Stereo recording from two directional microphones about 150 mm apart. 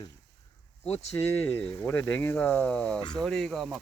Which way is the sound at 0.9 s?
45° left (ahead or behind).